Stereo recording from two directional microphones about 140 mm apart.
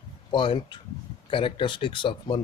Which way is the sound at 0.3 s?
35° left (ahead or behind).